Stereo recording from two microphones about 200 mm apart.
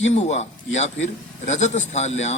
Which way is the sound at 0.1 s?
35° left (ahead or behind).